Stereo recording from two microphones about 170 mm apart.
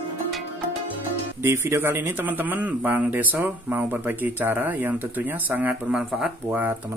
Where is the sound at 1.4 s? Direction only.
15° right (ahead or behind).